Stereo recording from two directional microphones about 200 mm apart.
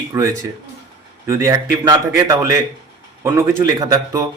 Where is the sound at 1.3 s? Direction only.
15° right (ahead or behind).